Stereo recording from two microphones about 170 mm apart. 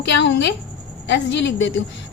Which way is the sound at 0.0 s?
90° left.